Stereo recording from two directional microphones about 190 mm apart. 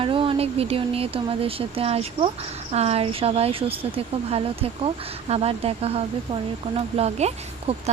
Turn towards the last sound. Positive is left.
turn(degrees=-35)  # may be behind; listen again after turning